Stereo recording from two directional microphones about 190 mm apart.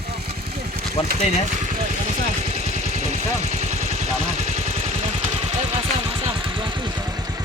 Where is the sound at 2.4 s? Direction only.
35° right (ahead or behind).